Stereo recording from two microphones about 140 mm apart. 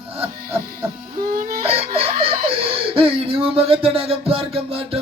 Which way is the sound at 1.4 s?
90° right.